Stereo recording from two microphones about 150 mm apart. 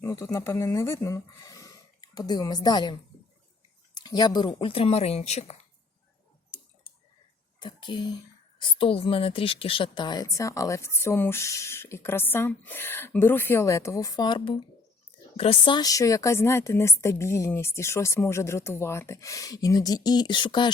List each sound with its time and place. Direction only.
0.0 s speech: 20° left (ahead or behind); by 5.5 s 45° left (ahead or behind)
7.6 s a woman's voice: 30° left (ahead or behind)